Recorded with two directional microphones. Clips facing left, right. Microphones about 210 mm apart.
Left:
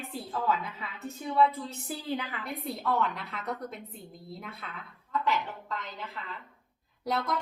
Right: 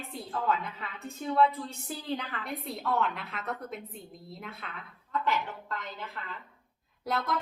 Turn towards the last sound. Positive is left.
turn(degrees=0)  # may be behind; listen again after turning